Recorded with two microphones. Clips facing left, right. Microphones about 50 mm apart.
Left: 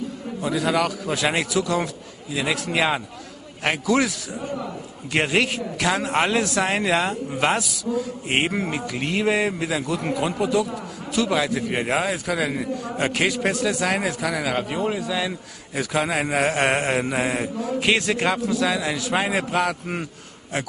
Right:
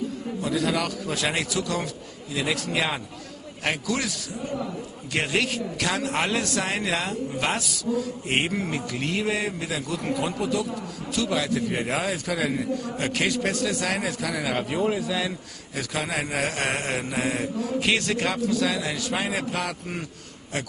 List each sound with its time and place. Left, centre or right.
0.4 s a man's voice: centre
5.1 s a man's voice: left
6.6 s speech: left
7.5 s a man's voice: centre
8.3 s a man's voice: centre
9.2 s speech: left
10.1 s a man's voice: centre
15.7 s a man's voice: centre
16.5 s a man's voice: left; by 19.1 s centre
19.1 s a man's voice: left